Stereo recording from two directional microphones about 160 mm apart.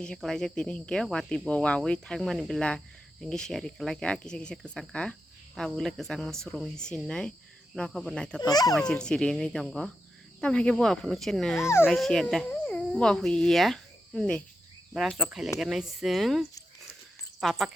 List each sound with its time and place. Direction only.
0.0 s speech: 5° left (ahead or behind)
8.4 s a child's voice: 25° left (ahead or behind)
8.9 s speech: 5° left (ahead or behind)